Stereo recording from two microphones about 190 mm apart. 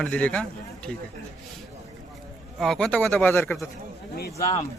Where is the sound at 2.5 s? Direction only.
Centre (ahead or behind).